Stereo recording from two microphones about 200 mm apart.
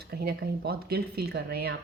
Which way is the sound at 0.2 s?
50° right (ahead or behind).